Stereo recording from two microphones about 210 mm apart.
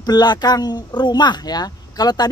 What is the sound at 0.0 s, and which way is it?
Speech, 20° left (ahead or behind).